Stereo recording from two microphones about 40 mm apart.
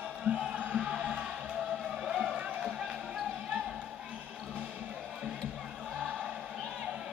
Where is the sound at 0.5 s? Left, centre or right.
Right.